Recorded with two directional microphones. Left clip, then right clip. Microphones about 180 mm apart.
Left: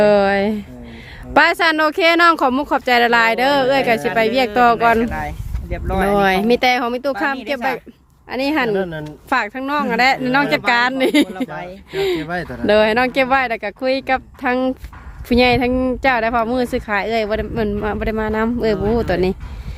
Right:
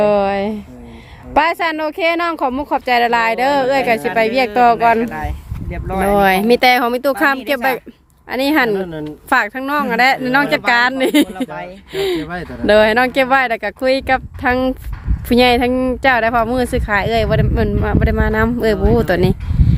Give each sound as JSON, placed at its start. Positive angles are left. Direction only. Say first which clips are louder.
{"t": 0.0, "sound": "speech", "louder": "left 1 dB", "side_deg": 10}
{"t": 8.7, "sound": "speech", "louder": "even", "side_deg": 35}
{"t": 9.3, "sound": "speech", "louder": "right 3 dB", "side_deg": -5}
{"t": 12.2, "sound": "speech", "louder": "left 2 dB", "side_deg": 30}
{"t": 12.6, "sound": "speech", "louder": "right 3 dB", "side_deg": -10}